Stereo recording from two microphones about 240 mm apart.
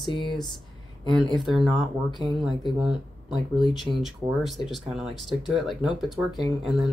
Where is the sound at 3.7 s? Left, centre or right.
Centre.